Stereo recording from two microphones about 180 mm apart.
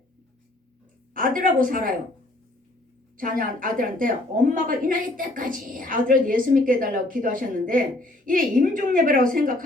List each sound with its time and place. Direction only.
1.1 s a woman's voice: 50° right (ahead or behind)
3.2 s a woman's voice: 50° right (ahead or behind)